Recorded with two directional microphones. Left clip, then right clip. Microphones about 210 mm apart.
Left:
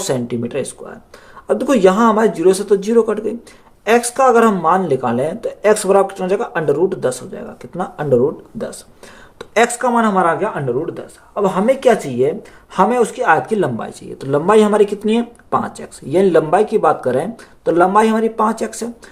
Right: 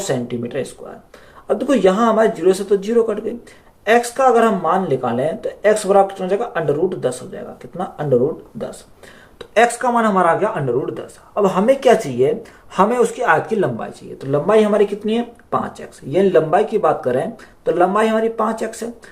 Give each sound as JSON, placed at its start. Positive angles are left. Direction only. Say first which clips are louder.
{"t": 0.0, "sound": "speech", "louder": "left 2 dB", "side_deg": 50}
{"t": 9.4, "sound": "speech", "louder": "even", "side_deg": 40}